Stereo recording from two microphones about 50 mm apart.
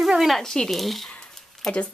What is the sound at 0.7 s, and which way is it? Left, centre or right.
Speech, centre.